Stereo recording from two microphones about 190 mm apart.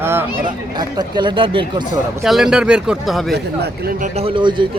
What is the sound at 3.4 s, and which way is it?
A man's voice, 55° right (ahead or behind).